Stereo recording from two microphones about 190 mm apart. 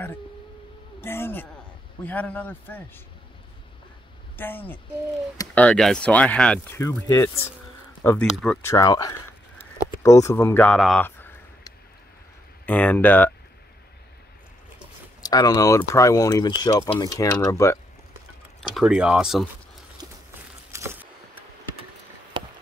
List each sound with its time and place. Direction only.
1.0 s speech: 10° left (ahead or behind)
4.4 s speech: 10° left (ahead or behind)
8.7 s speech: 20° left (ahead or behind)
15.2 s speech: 20° left (ahead or behind)
18.6 s speech: centre (ahead or behind)
20.0 s a sound: 20° right (ahead or behind)
22.3 s a sound: 25° right (ahead or behind)